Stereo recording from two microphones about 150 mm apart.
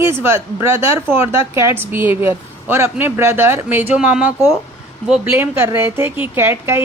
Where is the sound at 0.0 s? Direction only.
15° right (ahead or behind).